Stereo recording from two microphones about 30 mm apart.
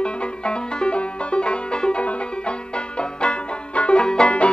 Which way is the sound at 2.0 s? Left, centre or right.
Left.